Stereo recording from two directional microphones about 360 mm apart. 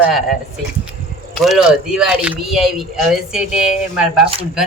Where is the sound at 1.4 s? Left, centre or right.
Centre.